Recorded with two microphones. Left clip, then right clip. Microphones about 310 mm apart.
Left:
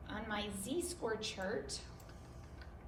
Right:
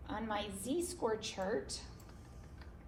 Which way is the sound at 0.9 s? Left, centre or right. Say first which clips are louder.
Right 2 dB; right.